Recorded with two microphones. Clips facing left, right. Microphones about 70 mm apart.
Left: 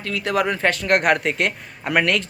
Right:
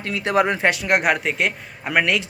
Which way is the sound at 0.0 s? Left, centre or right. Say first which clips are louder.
Right 2 dB; right.